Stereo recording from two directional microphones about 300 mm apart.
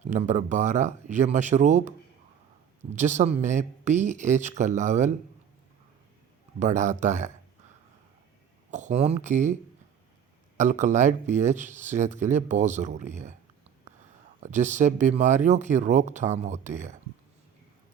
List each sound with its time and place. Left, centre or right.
0.0 s speech: right
2.9 s speech: right
6.6 s speech: right
8.7 s speech: right
10.6 s speech: right
14.4 s speech: right